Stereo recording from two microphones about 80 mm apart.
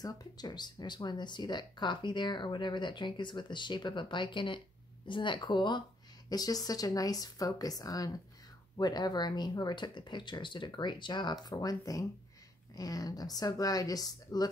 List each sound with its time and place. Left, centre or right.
0.0 s speech: left
11.4 s a woman's voice: left